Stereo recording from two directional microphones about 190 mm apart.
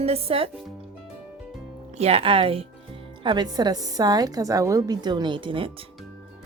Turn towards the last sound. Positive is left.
turn(degrees=-25)  # may be behind; listen again after turning